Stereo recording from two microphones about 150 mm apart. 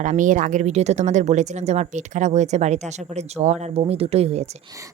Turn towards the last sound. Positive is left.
turn(degrees=-45)  # may be behind; listen again after turning